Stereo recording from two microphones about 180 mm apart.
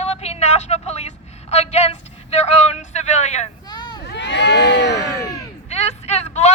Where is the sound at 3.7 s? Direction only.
25° left (ahead or behind).